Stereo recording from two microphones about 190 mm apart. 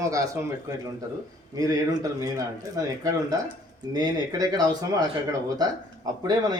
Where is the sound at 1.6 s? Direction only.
20° right (ahead or behind).